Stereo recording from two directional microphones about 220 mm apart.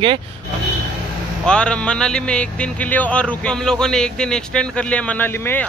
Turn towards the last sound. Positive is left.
turn(degrees=10)  # may be behind; listen again after turning